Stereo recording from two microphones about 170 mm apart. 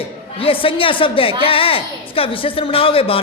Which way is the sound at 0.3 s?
35° left (ahead or behind).